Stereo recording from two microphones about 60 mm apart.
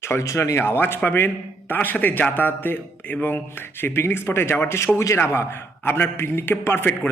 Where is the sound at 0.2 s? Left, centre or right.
Left.